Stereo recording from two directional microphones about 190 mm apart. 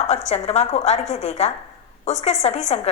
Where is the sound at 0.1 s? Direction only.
35° left (ahead or behind).